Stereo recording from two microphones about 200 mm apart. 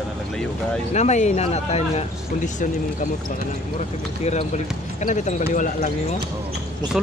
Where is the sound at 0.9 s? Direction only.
35° left (ahead or behind).